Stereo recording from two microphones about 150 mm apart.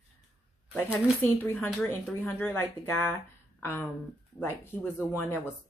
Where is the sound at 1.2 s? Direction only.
10° left (ahead or behind).